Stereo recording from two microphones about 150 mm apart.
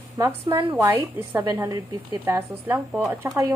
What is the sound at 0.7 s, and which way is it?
A woman's voice, 15° right (ahead or behind).